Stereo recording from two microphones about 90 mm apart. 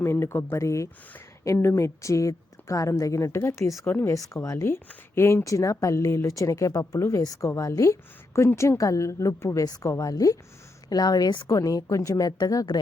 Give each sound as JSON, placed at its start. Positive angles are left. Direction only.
{"t": 0.0, "sound": "a woman's voice", "side_deg": 30}
{"t": 11.4, "sound": "a woman's voice", "side_deg": 40}